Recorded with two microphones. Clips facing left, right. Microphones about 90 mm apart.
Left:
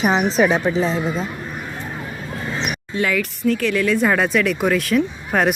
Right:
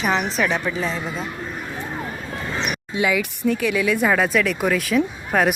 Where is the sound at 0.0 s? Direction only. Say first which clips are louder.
Left 3 dB; 15° left (ahead or behind).